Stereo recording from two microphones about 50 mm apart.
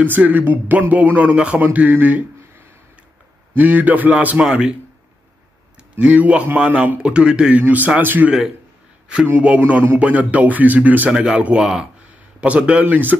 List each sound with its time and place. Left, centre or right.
0.0 s a man's voice: right
1.6 s speech: right
3.5 s speech: right
4.4 s a man's voice: centre
5.9 s a man's voice: right
7.0 s a man's voice: right
7.6 s speech: right
9.4 s a man's voice: right
11.1 s a man's voice: centre
12.8 s speech: right